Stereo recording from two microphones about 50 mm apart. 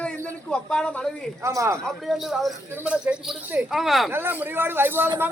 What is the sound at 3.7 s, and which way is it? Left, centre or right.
Speech, centre.